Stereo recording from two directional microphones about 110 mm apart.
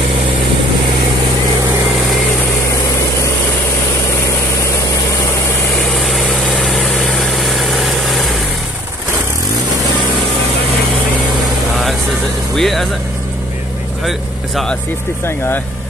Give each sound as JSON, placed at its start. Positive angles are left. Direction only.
{"t": 5.9, "sound": "vehicle", "side_deg": 0}
{"t": 12.5, "sound": "music", "side_deg": 0}
{"t": 14.0, "sound": "vehicle", "side_deg": 0}
{"t": 15.2, "sound": "speech", "side_deg": 20}